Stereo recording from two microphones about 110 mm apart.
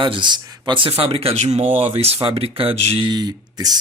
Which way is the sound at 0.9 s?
60° right (ahead or behind).